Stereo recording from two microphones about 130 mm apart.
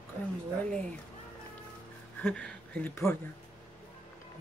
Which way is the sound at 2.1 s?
10° left (ahead or behind).